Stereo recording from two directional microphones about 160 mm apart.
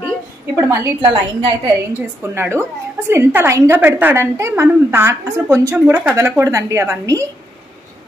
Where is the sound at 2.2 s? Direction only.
15° right (ahead or behind).